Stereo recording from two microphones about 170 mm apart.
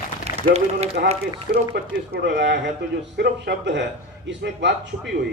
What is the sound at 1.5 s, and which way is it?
Speech, 70° right (ahead or behind).